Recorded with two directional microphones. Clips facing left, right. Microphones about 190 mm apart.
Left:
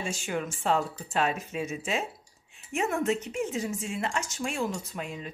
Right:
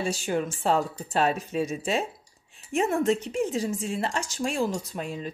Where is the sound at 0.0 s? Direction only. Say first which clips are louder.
Right 5 dB; 35° right (ahead or behind).